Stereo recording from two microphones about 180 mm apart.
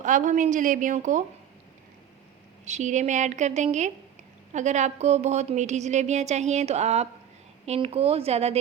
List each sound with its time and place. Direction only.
0.0 s a woman's voice: 45° right (ahead or behind)
2.6 s a woman's voice: 40° right (ahead or behind)